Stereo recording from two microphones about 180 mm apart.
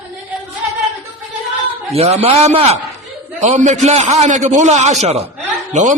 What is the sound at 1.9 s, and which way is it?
A man's voice, 35° right (ahead or behind).